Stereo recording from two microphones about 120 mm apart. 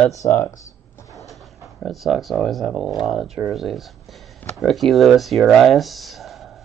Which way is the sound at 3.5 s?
Centre (ahead or behind).